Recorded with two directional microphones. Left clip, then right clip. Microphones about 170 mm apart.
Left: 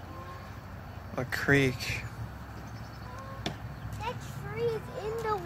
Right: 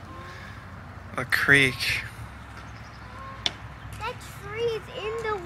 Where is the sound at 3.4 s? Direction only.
60° left (ahead or behind).